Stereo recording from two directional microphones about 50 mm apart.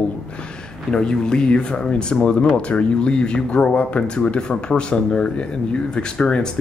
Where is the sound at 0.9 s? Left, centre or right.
Centre.